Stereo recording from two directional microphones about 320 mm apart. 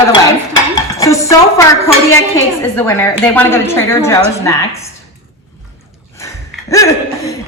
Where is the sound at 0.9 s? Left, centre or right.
Centre.